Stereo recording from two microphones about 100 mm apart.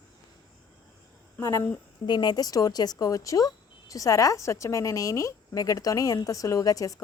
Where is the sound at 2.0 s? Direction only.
45° left (ahead or behind).